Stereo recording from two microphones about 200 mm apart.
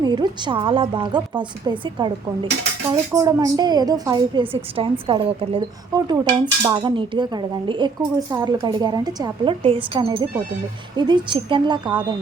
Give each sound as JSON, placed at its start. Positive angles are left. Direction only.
{"t": 0.0, "sound": "speech", "side_deg": -20}